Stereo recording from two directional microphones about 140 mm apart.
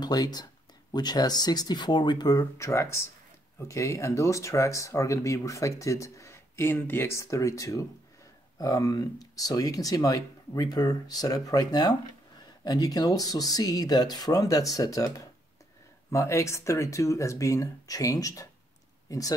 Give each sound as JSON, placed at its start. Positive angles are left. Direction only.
{"t": 0.0, "sound": "speech", "side_deg": 30}